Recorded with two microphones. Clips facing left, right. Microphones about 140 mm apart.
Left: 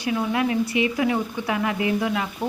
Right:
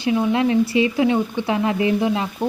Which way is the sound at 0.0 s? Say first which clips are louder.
Right 5 dB; 25° right (ahead or behind).